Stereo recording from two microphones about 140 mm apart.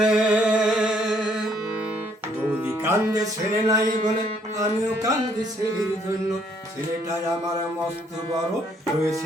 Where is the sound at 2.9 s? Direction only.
25° right (ahead or behind).